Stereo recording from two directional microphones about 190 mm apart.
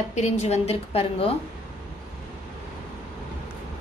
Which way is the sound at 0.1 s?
35° left (ahead or behind).